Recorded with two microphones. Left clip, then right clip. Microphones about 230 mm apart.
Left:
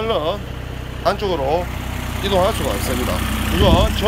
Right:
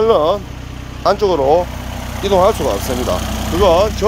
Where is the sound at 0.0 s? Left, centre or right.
Right.